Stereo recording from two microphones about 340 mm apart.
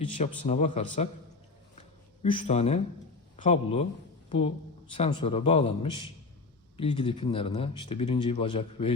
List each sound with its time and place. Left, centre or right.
0.2 s a man's voice: centre
2.2 s a man's voice: centre